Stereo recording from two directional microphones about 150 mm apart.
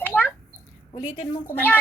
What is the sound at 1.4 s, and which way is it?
Speech, 10° left (ahead or behind).